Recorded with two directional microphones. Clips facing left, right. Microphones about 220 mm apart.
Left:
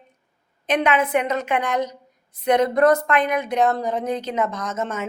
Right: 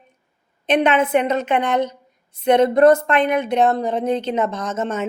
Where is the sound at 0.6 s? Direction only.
30° right (ahead or behind).